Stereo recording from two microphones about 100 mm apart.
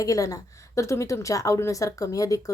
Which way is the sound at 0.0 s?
35° left (ahead or behind).